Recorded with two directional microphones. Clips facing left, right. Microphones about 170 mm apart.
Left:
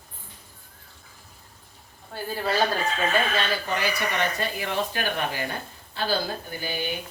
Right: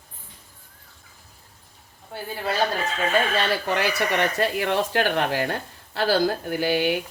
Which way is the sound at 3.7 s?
75° right (ahead or behind).